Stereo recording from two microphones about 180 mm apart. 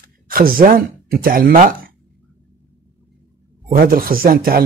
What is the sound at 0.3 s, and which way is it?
Speech, 55° right (ahead or behind).